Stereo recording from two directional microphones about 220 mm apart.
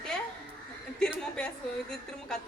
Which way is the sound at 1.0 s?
5° left (ahead or behind).